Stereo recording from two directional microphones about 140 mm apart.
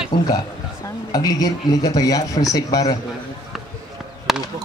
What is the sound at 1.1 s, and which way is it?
Speech, 25° left (ahead or behind).